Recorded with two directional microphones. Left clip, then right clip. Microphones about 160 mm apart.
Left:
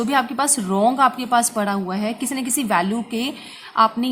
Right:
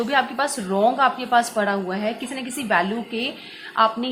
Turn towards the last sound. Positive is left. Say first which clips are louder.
# left 2 dB
turn(degrees=40)  # may be behind; listen again after turning